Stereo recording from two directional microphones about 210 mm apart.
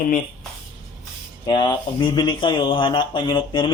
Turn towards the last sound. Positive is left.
turn(degrees=25)  # may be behind; listen again after turning